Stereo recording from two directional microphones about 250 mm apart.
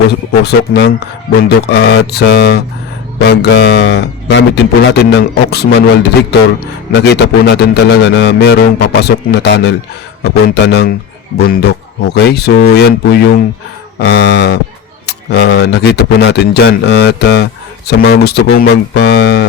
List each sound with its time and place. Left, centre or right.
0.1 s a man's voice: left